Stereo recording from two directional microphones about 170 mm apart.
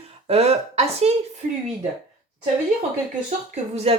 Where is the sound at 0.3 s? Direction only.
35° right (ahead or behind).